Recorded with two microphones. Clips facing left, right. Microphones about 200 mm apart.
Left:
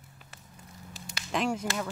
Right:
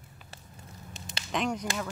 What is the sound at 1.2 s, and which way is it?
Speech, centre (ahead or behind).